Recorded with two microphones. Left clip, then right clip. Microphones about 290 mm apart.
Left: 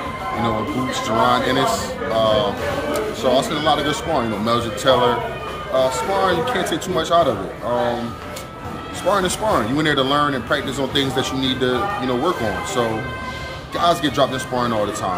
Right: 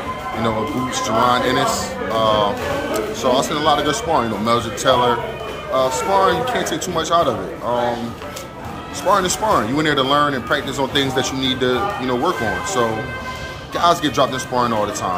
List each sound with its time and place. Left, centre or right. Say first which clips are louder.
1.0 s speech: right 1 dB; centre
9.1 s speech: right 3 dB; centre
13.7 s speech: right 1 dB; centre